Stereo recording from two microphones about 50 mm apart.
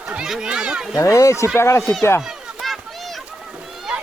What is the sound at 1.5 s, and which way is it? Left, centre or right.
Speech, left.